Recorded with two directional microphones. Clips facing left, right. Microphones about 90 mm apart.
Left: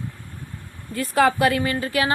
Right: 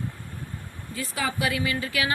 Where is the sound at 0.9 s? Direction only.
55° left (ahead or behind).